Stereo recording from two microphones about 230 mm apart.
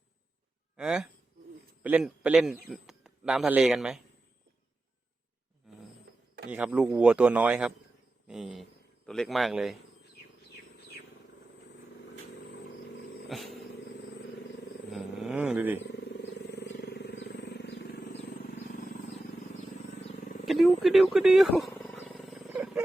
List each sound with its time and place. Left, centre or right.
0.8 s a man's voice: centre
6.5 s speech: centre
13.2 s a sound: centre
14.8 s wild animals: centre
15.8 s wild animals: left
19.5 s a sound: left
20.4 s wild animals: centre